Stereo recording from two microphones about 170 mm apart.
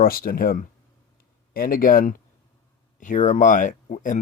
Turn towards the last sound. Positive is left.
turn(degrees=45)  # may be behind; listen again after turning